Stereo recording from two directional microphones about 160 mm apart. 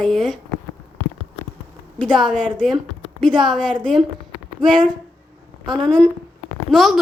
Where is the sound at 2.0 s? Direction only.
Centre (ahead or behind).